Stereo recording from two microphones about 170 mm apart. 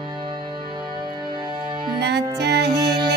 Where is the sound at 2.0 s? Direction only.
80° right.